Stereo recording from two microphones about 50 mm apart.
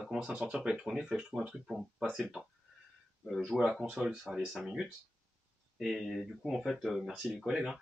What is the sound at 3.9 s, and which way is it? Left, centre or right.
Speech, centre.